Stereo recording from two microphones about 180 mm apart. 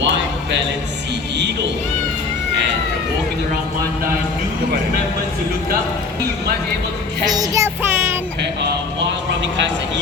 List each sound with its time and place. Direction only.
0.0 s a sound: 85° right
7.3 s child singing: 20° right (ahead or behind)
9.4 s speech: 85° right